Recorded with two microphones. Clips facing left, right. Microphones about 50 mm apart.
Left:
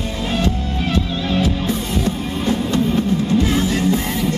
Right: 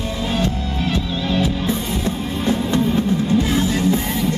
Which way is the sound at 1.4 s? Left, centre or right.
Centre.